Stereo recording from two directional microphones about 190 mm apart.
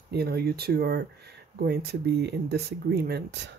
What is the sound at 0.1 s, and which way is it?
Speech, 55° right (ahead or behind).